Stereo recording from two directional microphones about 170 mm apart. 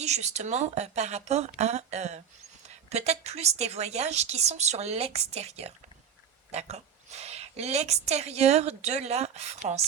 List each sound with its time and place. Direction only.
0.0 s a woman's voice: 40° right (ahead or behind)